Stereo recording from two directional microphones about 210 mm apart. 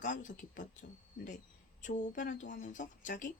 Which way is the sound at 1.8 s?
35° left (ahead or behind).